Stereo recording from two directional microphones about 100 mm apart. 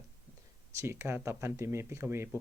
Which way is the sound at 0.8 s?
25° right (ahead or behind).